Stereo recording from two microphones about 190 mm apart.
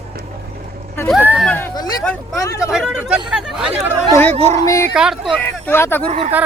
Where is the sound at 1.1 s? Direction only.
5° right (ahead or behind).